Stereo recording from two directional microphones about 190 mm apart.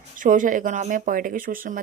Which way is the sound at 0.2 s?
45° right (ahead or behind).